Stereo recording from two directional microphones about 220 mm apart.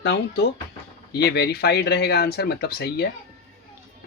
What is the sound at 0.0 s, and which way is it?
Speech, 50° left (ahead or behind).